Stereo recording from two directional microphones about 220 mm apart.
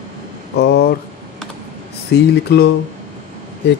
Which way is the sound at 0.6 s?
50° left (ahead or behind).